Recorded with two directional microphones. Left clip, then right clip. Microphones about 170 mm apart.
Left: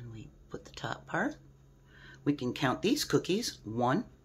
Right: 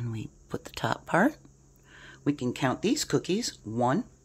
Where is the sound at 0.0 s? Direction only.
65° right (ahead or behind).